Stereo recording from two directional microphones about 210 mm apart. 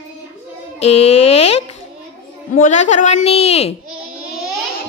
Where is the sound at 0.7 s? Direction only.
30° left (ahead or behind).